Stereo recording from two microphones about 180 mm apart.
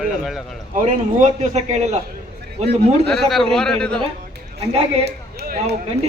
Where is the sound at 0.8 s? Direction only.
40° right (ahead or behind).